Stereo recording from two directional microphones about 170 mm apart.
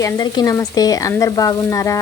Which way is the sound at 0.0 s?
20° left (ahead or behind).